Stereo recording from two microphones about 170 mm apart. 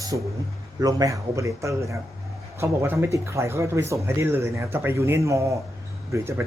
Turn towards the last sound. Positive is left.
turn(degrees=-15)  # may be behind; listen again after turning